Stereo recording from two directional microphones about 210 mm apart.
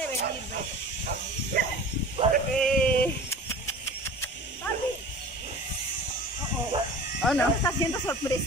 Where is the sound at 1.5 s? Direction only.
45° right (ahead or behind).